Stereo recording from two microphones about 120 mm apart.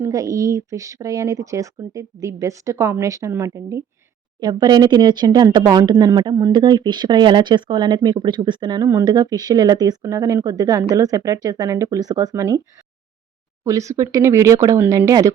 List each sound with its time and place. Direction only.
0.0 s speech: 30° right (ahead or behind)
4.4 s speech: 35° right (ahead or behind)
13.7 s speech: 25° right (ahead or behind)